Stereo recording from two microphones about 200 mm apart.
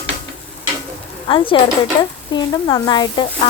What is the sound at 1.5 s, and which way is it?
Speech, 25° left (ahead or behind).